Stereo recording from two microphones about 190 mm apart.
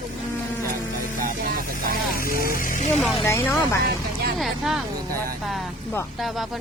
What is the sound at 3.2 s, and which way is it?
Speech, 15° left (ahead or behind).